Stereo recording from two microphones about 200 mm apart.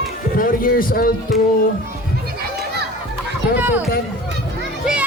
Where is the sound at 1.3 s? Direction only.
Centre (ahead or behind).